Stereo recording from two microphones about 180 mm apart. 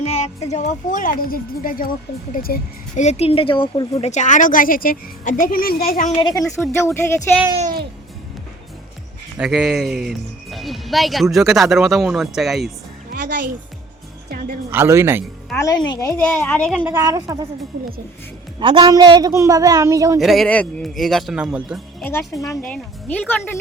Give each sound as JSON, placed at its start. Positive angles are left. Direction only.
{"t": 0.0, "sound": "a woman's voice", "side_deg": 40}
{"t": 3.0, "sound": "a woman's voice", "side_deg": 35}
{"t": 6.1, "sound": "a woman's voice", "side_deg": 20}
{"t": 9.4, "sound": "speech", "side_deg": 0}
{"t": 14.7, "sound": "a woman's voice", "side_deg": -15}
{"t": 15.5, "sound": "a child's voice", "side_deg": 20}
{"t": 16.8, "sound": "a woman's voice", "side_deg": -15}
{"t": 18.6, "sound": "a woman's voice", "side_deg": -25}
{"t": 20.1, "sound": "speech", "side_deg": 0}
{"t": 22.0, "sound": "a child's voice", "side_deg": 15}